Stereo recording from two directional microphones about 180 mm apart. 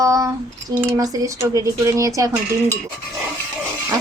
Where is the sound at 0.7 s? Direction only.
20° right (ahead or behind).